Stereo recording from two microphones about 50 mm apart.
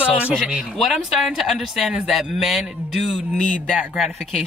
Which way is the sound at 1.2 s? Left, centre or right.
Centre.